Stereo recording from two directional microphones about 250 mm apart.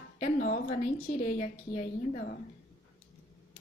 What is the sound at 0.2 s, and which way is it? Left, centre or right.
Speech, left.